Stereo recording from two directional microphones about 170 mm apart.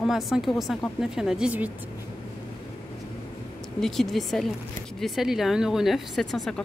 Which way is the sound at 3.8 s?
Centre (ahead or behind).